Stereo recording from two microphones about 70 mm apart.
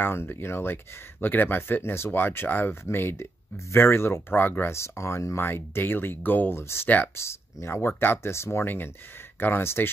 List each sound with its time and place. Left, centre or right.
0.0 s speech: left